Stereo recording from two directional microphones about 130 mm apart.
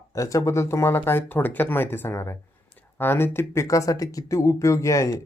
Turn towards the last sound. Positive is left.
turn(degrees=25)  # may be behind; listen again after turning